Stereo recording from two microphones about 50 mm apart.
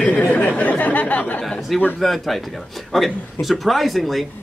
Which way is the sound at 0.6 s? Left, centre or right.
Left.